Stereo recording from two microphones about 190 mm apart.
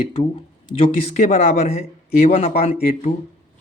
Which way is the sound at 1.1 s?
35° left (ahead or behind).